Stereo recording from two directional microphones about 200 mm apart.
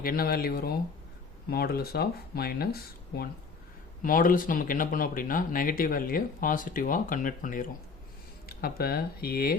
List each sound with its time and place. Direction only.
0.0 s speech: 45° left (ahead or behind)